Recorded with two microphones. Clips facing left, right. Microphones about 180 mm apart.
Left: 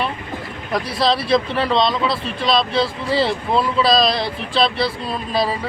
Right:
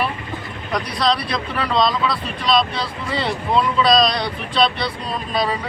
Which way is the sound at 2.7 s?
30° left (ahead or behind).